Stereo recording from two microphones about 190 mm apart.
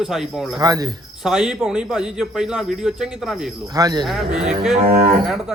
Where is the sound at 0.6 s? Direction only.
20° right (ahead or behind).